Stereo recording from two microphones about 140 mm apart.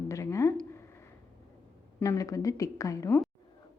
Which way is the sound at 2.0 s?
25° left (ahead or behind).